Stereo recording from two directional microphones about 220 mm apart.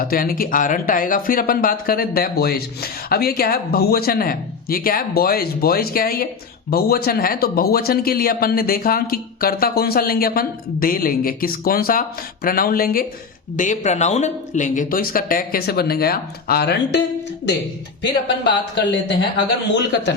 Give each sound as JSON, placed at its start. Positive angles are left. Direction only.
{"t": 0.0, "sound": "speech", "side_deg": 40}
{"t": 18.7, "sound": "speech", "side_deg": 55}